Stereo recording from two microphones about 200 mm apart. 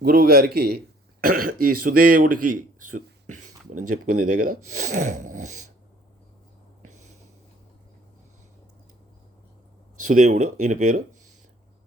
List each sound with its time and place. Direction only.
0.0 s a man's voice: 50° right (ahead or behind)
10.0 s speech: 40° right (ahead or behind)